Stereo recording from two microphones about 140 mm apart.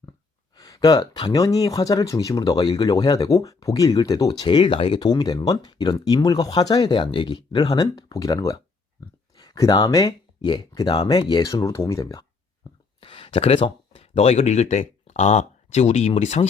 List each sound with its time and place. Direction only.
0.5 s speech: 25° left (ahead or behind)
9.0 s a sound: 25° left (ahead or behind)
9.4 s speech: 30° left (ahead or behind)
13.0 s speech: 40° left (ahead or behind)